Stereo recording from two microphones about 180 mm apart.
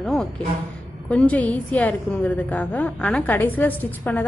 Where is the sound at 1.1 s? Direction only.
10° left (ahead or behind).